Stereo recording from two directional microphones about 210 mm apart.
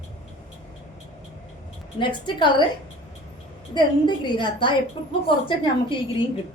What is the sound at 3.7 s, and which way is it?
A woman's voice, 20° left (ahead or behind).